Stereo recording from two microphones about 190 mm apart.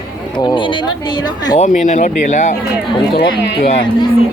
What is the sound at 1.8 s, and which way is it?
Speech, 40° left (ahead or behind).